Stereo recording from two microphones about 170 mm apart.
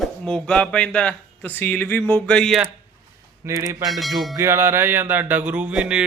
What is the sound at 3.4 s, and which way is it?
Speech, 20° right (ahead or behind).